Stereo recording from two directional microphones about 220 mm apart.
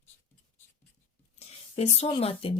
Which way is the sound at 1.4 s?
30° left (ahead or behind).